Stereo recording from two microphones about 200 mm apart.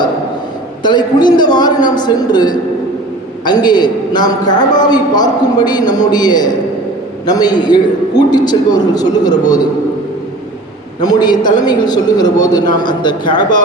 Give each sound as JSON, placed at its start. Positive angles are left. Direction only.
{"t": 0.8, "sound": "a man's voice", "side_deg": 20}
{"t": 11.0, "sound": "a man's voice", "side_deg": 20}